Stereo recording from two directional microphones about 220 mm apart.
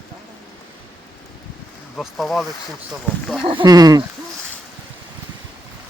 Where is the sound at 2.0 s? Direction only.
Centre (ahead or behind).